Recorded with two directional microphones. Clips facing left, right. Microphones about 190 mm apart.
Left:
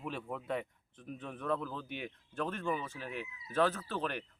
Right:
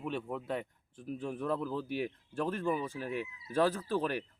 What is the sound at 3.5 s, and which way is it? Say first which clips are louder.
Speech: right 2 dB; 10° right (ahead or behind).